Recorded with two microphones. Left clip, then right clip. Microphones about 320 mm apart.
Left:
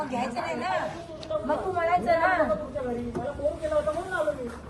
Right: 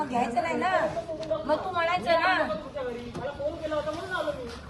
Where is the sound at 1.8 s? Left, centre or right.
Right.